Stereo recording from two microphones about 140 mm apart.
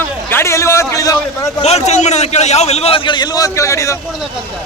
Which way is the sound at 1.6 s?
50° left (ahead or behind).